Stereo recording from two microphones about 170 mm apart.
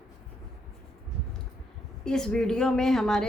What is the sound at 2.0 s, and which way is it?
A woman's voice, 5° left (ahead or behind).